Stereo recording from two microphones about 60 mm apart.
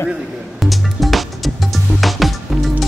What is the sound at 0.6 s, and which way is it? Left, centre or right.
Music, centre.